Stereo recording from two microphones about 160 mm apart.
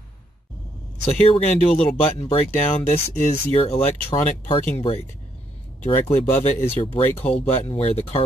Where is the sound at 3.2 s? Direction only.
40° left (ahead or behind).